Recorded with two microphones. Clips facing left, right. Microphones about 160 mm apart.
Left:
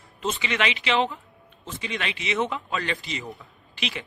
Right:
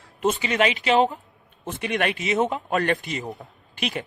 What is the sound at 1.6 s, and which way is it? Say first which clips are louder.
A man's voice: right 7 dB; 60° right (ahead or behind).